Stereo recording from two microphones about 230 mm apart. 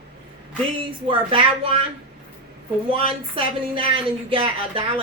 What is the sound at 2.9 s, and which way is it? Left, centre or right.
Speech, right.